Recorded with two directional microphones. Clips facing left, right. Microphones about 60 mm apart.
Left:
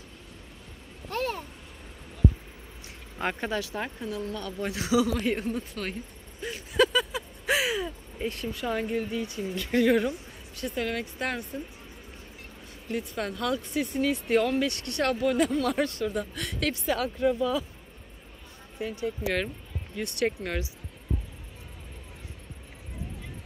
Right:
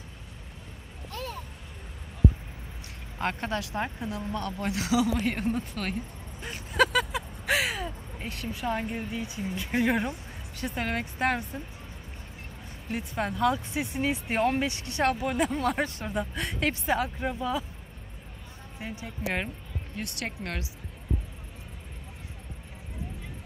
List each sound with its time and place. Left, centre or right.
1.1 s a sound: left
3.2 s a man's voice: centre
3.8 s speech: centre
4.4 s a man's voice: centre
6.8 s vehicle: right
8.5 s speech: centre
10.6 s speech: right
12.9 s speech: right
15.5 s speech: right
18.8 s speech: right
20.0 s a man's voice: centre